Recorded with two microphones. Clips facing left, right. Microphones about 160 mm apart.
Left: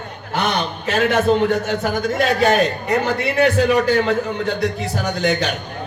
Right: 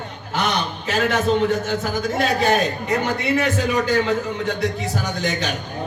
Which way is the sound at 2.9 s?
60° left (ahead or behind).